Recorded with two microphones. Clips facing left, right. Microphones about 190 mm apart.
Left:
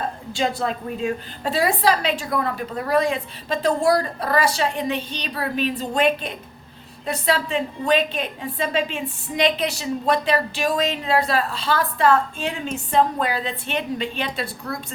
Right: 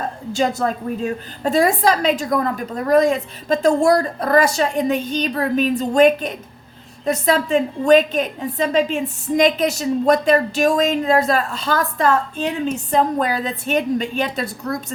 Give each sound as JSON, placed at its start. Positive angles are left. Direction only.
{"t": 0.3, "sound": "a woman's voice", "side_deg": -45}